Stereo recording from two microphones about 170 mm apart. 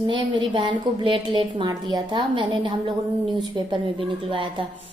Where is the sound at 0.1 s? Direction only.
30° right (ahead or behind).